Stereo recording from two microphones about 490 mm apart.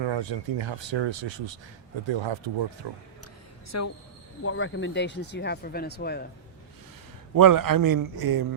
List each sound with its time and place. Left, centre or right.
0.0 s speech: right
3.7 s a woman's voice: left
7.3 s a man's voice: right